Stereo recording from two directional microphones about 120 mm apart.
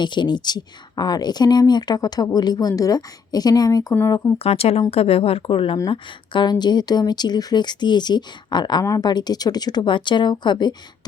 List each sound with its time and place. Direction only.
0.0 s speech: 40° left (ahead or behind)
4.4 s speech: 55° left (ahead or behind); by 10.8 s 40° left (ahead or behind)